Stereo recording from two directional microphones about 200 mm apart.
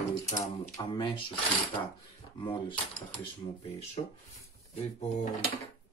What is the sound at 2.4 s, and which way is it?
Speech, 25° left (ahead or behind).